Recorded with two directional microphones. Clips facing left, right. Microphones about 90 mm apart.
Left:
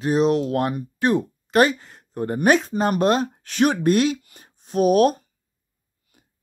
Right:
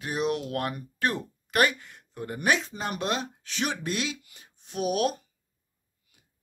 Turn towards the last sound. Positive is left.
turn(degrees=40)  # may be behind; listen again after turning